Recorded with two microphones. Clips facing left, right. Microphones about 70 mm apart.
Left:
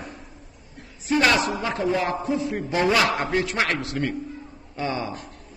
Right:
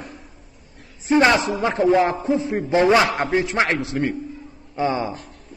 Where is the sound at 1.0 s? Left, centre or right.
Right.